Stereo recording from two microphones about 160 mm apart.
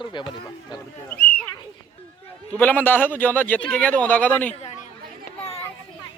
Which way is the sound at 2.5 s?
10° left (ahead or behind).